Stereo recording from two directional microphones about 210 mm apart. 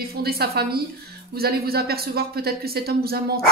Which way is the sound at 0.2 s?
45° right (ahead or behind).